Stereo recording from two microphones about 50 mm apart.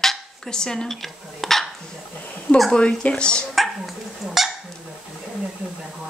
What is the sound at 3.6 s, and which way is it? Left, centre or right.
Dog, centre.